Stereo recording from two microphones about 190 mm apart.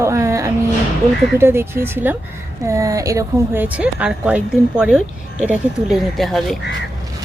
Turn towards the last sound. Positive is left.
turn(degrees=0)  # may be behind; listen again after turning